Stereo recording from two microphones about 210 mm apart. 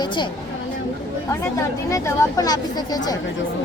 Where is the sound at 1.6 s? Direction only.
15° left (ahead or behind).